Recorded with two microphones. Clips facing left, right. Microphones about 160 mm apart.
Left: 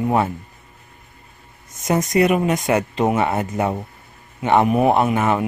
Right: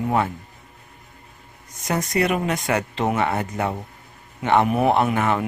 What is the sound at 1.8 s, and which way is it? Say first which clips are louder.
Speech: left 5 dB; 20° left (ahead or behind).